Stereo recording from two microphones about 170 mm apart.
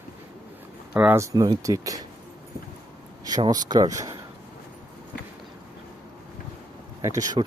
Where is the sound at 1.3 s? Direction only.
25° right (ahead or behind).